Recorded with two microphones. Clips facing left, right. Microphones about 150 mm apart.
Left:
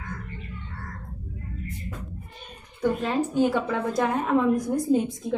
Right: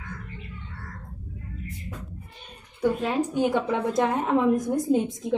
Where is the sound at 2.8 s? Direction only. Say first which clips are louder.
Even; 10° right (ahead or behind).